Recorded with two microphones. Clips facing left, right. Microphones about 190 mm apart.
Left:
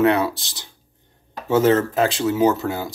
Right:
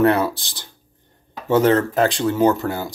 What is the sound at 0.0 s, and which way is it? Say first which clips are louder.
Speech: right 1 dB; centre (ahead or behind).